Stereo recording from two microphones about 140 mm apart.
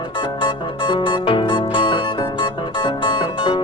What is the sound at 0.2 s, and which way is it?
Music, 35° left (ahead or behind).